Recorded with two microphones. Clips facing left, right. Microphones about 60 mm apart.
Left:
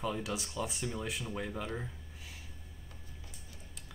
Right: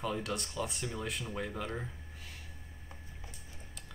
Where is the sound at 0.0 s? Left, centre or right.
Centre.